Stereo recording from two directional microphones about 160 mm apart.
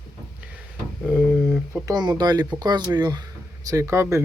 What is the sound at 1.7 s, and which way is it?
Speech, 20° right (ahead or behind).